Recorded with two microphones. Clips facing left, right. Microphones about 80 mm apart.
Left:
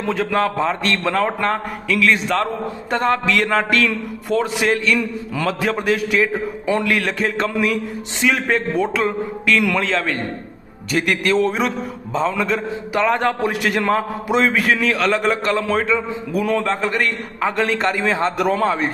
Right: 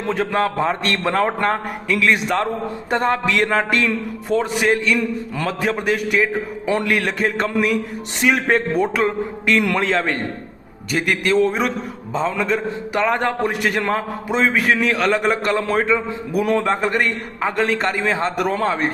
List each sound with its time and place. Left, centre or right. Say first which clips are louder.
0.1 s a man's voice: even; centre
6.8 s a man's voice: even; centre
10.9 s a man's voice: even; centre